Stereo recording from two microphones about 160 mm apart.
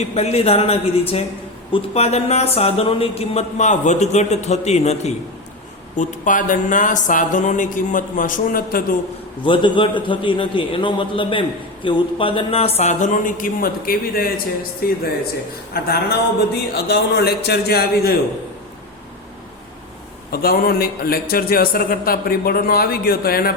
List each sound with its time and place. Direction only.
0.0 s a man's voice: 40° left (ahead or behind)
6.0 s speech: 55° left (ahead or behind)
9.4 s a man's voice: 30° left (ahead or behind); by 16.1 s 75° left (ahead or behind)
16.6 s a man's voice: 90° left; by 18.2 s 75° left (ahead or behind)
20.3 s a man's voice: 70° left (ahead or behind)